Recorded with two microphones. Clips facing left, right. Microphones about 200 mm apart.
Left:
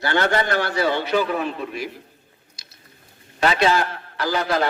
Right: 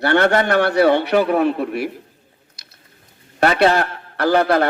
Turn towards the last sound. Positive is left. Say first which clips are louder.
# right 7 dB
turn(degrees=-60)  # may be behind; listen again after turning